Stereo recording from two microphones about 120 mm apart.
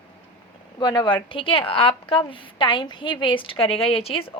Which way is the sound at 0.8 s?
40° left (ahead or behind).